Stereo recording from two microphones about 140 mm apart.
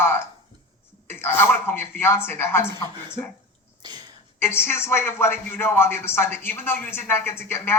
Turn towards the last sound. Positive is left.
turn(degrees=15)  # may be behind; listen again after turning